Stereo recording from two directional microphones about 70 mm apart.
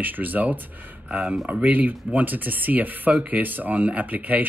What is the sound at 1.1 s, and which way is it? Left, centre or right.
Speech, centre.